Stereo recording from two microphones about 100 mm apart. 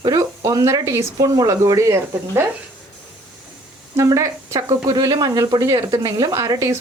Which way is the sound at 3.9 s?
30° right (ahead or behind).